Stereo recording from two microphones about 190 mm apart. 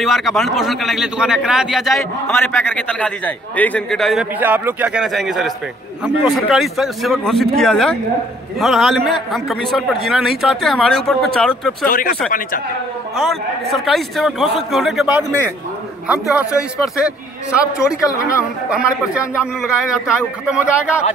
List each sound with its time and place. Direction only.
0.0 s a man's voice: centre (ahead or behind)
2.3 s a man's voice: 10° left (ahead or behind)
11.9 s speech: 45° left (ahead or behind)
13.2 s a man's voice: centre (ahead or behind)